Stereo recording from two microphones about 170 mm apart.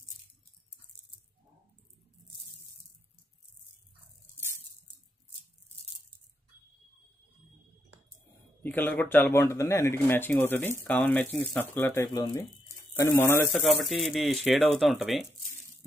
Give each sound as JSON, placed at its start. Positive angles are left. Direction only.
{"t": 8.6, "sound": "speech", "side_deg": 10}
{"t": 13.5, "sound": "speech", "side_deg": 0}